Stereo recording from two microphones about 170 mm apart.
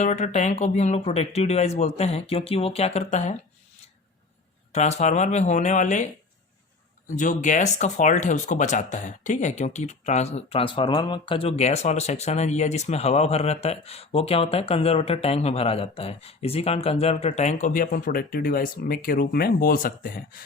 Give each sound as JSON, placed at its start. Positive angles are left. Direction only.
{"t": 0.0, "sound": "speech", "side_deg": 45}
{"t": 4.7, "sound": "speech", "side_deg": 40}
{"t": 7.2, "sound": "speech", "side_deg": 50}